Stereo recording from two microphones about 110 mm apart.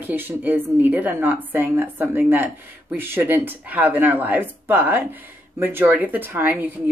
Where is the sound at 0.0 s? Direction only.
20° right (ahead or behind).